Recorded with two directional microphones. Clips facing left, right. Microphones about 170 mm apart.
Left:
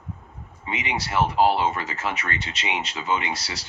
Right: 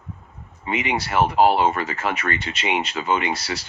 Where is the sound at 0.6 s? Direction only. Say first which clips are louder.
Right 5 dB; 55° right (ahead or behind).